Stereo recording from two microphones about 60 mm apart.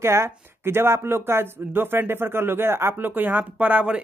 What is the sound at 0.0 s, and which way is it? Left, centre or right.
Speech, right.